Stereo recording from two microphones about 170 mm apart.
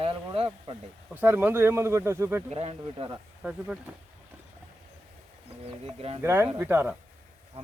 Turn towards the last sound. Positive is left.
turn(degrees=-10)  # may be behind; listen again after turning